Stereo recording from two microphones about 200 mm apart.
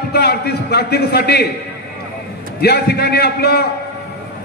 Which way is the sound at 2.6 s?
55° left (ahead or behind).